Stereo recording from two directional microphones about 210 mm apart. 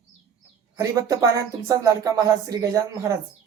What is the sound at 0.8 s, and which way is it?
Speech, 15° right (ahead or behind).